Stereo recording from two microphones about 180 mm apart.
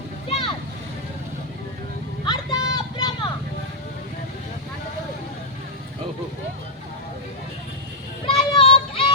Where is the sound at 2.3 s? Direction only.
20° left (ahead or behind).